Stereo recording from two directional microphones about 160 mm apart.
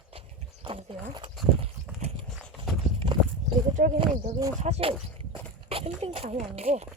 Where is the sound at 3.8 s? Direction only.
60° right (ahead or behind).